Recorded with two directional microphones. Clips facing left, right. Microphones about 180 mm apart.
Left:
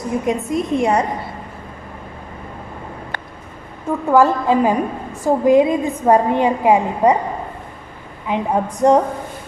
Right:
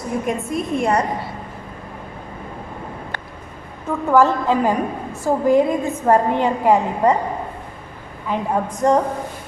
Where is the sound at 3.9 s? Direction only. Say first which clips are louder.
Left 1 dB; 15° left (ahead or behind).